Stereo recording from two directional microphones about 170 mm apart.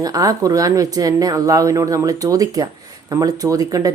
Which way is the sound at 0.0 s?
20° right (ahead or behind).